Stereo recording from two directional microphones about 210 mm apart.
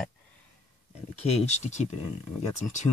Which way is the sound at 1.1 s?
30° left (ahead or behind).